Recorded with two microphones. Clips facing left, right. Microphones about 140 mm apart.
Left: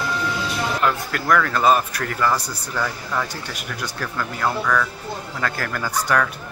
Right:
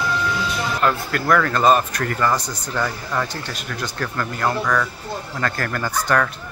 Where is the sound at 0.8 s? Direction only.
Centre (ahead or behind).